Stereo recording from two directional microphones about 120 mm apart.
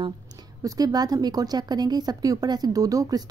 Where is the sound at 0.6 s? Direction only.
30° right (ahead or behind).